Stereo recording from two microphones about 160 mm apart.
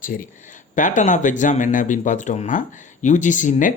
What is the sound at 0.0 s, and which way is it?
Speech, 60° left (ahead or behind).